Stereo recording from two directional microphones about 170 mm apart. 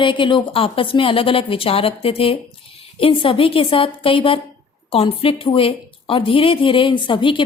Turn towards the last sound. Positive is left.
turn(degrees=30)  # may be behind; listen again after turning